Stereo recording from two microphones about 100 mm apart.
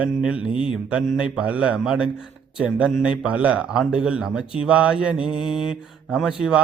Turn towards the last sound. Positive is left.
turn(degrees=-5)  # may be behind; listen again after turning